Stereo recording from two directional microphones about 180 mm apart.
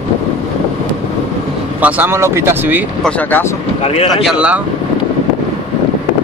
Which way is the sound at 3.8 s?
35° left (ahead or behind).